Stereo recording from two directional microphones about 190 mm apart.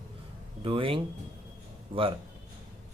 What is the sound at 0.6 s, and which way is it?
Speech, 30° right (ahead or behind).